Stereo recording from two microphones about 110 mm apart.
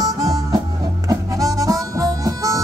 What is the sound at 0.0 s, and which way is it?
Music, 30° right (ahead or behind).